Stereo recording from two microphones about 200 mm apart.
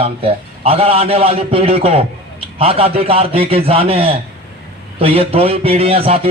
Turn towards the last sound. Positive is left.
turn(degrees=-30)  # may be behind; listen again after turning